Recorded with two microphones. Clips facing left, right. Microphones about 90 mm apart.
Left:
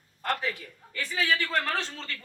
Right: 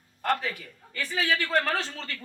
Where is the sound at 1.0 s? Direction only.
35° right (ahead or behind).